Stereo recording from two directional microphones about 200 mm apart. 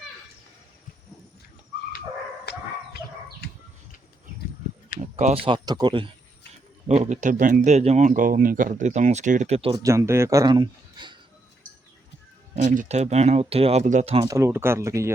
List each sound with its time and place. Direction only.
2.5 s dog: 55° left (ahead or behind)
4.9 s speech: 30° right (ahead or behind)
6.8 s speech: 35° right (ahead or behind)
9.7 s speech: 15° right (ahead or behind)
12.6 s speech: 40° right (ahead or behind)
14.3 s speech: 15° right (ahead or behind)